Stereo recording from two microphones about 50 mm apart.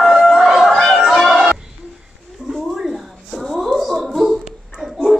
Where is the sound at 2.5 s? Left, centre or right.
Centre.